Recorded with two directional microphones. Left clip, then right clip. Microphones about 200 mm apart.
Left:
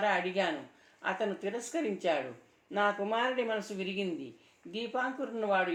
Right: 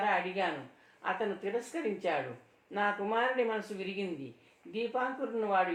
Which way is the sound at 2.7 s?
50° left (ahead or behind).